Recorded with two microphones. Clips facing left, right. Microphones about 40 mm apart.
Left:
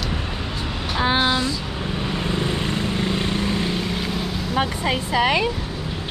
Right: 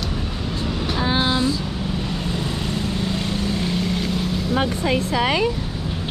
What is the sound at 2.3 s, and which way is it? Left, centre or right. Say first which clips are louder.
Vehicle: left 2 dB; left.